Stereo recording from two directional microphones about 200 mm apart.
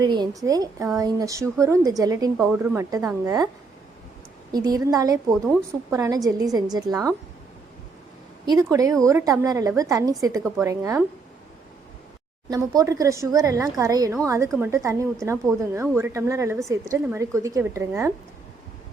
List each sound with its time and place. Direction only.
0.0 s a woman's voice: 20° right (ahead or behind)
4.5 s a woman's voice: 20° right (ahead or behind)
5.3 s a woman's voice: centre (ahead or behind)
5.9 s a woman's voice: 15° right (ahead or behind)
8.4 s a woman's voice: 15° right (ahead or behind)
12.5 s a woman's voice: 15° right (ahead or behind)